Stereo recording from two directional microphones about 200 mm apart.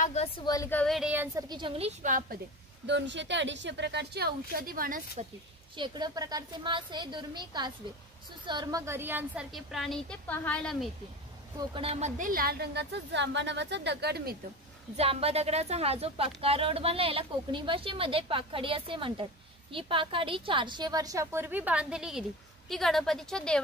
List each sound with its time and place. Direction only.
0.0 s a woman's voice: 30° left (ahead or behind)
0.5 s a woman's voice: 15° left (ahead or behind); by 1.4 s 10° right (ahead or behind)
1.5 s speech: 25° right (ahead or behind)
2.0 s a woman's voice: 40° right (ahead or behind)
2.9 s a woman's voice: 65° right (ahead or behind); by 5.2 s 45° right (ahead or behind)
5.8 s a woman's voice: 20° right (ahead or behind); by 10.9 s 5° left (ahead or behind)
11.5 s a woman's voice: 25° right (ahead or behind); by 14.3 s 55° right (ahead or behind)
15.0 s a woman's voice: 30° right (ahead or behind); by 23.6 s 5° left (ahead or behind)